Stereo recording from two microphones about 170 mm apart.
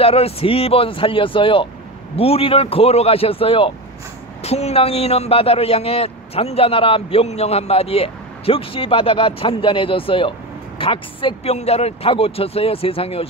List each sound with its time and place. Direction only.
0.0 s a man's voice: 35° left (ahead or behind)